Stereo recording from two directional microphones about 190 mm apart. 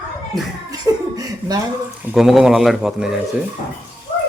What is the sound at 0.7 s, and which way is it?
Chuckle, 20° right (ahead or behind).